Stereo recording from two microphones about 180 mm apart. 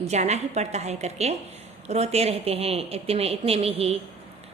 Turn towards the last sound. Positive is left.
turn(degrees=-35)  # may be behind; listen again after turning